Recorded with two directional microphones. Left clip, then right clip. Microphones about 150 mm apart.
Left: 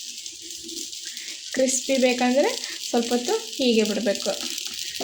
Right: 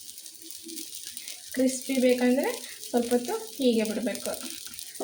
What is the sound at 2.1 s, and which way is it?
Frying, 80° left.